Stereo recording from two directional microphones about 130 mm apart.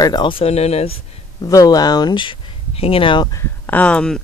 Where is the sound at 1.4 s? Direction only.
30° left (ahead or behind).